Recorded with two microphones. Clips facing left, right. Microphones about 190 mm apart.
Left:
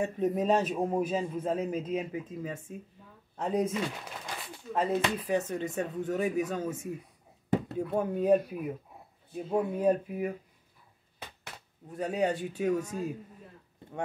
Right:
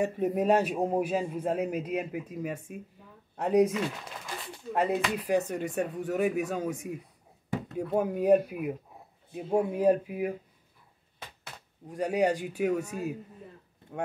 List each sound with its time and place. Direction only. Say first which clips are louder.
0.0 s a man's voice: right 2 dB; 10° right (ahead or behind)
4.7 s a man's voice: right 1 dB; 10° right (ahead or behind)
7.9 s a man's voice: right 2 dB; 10° right (ahead or behind)
11.9 s a man's voice: right 3 dB; 10° right (ahead or behind)